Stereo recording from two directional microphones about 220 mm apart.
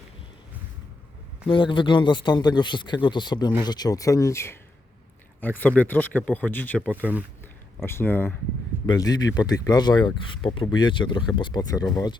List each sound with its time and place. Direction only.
1.5 s speech: 20° left (ahead or behind); by 6.9 s 5° left (ahead or behind)
6.9 s speech: 5° right (ahead or behind)
7.9 s speech: 10° left (ahead or behind)